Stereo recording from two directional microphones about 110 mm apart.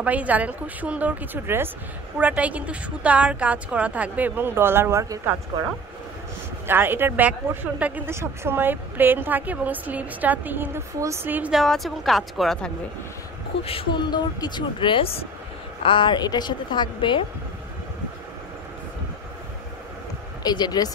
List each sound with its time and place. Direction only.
0.0 s a woman's voice: 15° right (ahead or behind)
6.7 s a woman's voice: 20° right (ahead or behind)
11.5 s speech: centre (ahead or behind)
13.7 s a sound: 55° left (ahead or behind)
14.1 s a woman's voice: 40° left (ahead or behind)
20.4 s speech: 40° left (ahead or behind)